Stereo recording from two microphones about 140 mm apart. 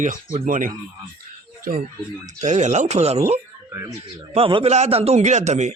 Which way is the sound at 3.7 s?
20° right (ahead or behind).